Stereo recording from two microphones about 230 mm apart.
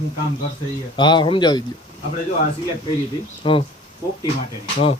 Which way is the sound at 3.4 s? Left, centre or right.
Left.